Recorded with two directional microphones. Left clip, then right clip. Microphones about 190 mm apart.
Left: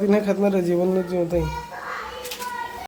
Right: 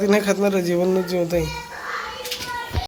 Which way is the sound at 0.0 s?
Centre (ahead or behind).